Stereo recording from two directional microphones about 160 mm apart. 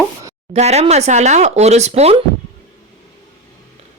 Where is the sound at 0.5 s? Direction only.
45° right (ahead or behind).